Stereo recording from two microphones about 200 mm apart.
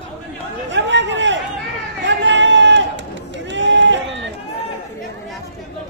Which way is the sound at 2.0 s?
60° right (ahead or behind).